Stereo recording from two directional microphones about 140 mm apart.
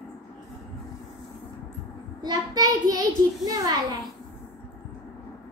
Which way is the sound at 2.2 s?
30° right (ahead or behind).